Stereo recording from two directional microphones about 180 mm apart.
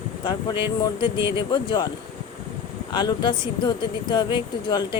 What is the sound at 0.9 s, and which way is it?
Speech, 25° left (ahead or behind).